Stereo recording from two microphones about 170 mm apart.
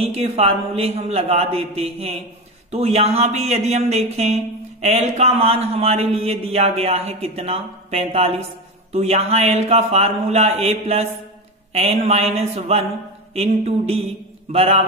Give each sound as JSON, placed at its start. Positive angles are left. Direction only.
{"t": 0.0, "sound": "a man's voice", "side_deg": -40}